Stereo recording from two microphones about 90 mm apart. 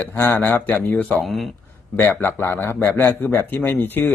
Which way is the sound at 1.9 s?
20° left (ahead or behind).